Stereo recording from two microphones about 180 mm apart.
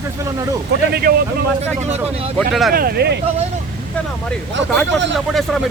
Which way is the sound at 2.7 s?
60° right (ahead or behind).